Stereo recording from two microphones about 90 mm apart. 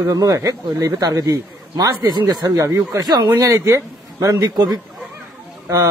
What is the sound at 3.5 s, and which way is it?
Speech, 35° right (ahead or behind).